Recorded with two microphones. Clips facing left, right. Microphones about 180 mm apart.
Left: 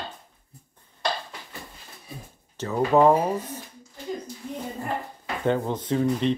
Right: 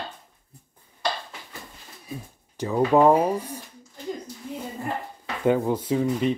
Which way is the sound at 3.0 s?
10° right (ahead or behind).